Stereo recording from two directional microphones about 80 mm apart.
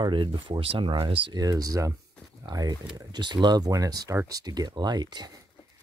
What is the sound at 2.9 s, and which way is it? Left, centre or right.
Speech, right.